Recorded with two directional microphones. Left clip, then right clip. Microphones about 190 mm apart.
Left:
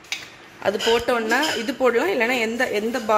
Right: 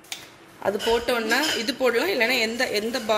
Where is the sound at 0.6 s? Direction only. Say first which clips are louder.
Left 3 dB; 5° left (ahead or behind).